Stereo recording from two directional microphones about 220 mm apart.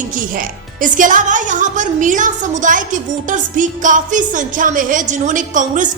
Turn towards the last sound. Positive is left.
turn(degrees=-35)  # may be behind; listen again after turning